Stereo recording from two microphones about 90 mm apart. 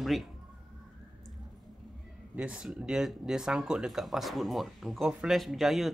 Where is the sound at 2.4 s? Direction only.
10° right (ahead or behind).